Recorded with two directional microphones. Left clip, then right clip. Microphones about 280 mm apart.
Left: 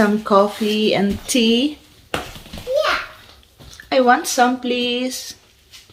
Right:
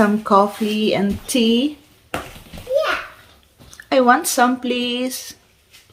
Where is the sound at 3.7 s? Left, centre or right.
Centre.